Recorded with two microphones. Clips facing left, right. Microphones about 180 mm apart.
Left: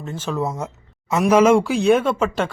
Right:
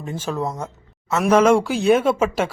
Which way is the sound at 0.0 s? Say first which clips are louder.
Right 1 dB; 15° right (ahead or behind).